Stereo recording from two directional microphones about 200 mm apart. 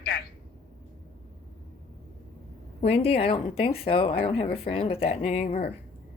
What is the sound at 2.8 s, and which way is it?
Speech, 30° left (ahead or behind).